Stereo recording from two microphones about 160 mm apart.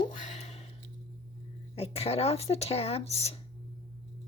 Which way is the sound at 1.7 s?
40° left (ahead or behind).